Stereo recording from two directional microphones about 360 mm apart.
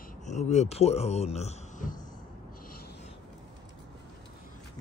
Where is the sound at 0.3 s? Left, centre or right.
Centre.